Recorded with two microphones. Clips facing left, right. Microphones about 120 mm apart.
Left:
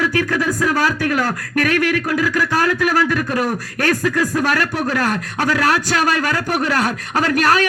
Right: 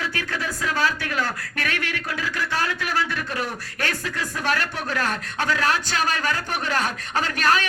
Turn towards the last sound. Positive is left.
turn(degrees=40)  # may be behind; listen again after turning